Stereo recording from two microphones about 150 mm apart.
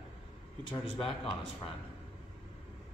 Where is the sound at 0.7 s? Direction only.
35° left (ahead or behind).